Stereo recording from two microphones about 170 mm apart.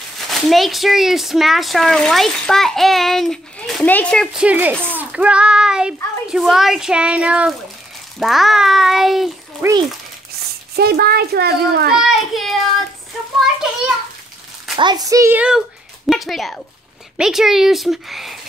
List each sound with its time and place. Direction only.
0.3 s speech: centre (ahead or behind)
9.6 s a child's voice: 10° right (ahead or behind)
10.8 s a child's voice: 65° right (ahead or behind)
12.0 s speech: centre (ahead or behind)
13.6 s children playing: 5° right (ahead or behind)
14.8 s speech: 25° right (ahead or behind); by 18.4 s centre (ahead or behind)